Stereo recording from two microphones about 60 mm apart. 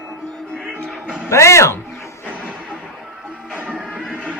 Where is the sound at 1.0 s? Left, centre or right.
Centre.